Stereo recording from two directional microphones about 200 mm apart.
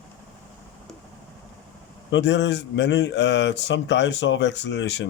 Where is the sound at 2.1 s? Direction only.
65° left (ahead or behind).